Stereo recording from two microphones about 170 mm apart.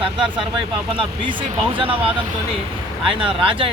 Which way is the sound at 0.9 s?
30° right (ahead or behind).